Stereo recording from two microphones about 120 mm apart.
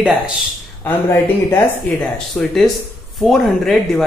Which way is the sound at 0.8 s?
20° left (ahead or behind).